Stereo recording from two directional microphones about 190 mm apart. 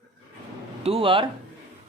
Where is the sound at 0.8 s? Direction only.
30° right (ahead or behind).